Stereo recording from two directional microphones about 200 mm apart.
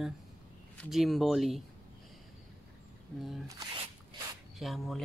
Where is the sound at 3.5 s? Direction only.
20° right (ahead or behind).